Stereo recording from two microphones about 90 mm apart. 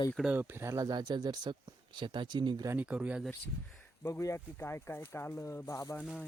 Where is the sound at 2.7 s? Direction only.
15° right (ahead or behind).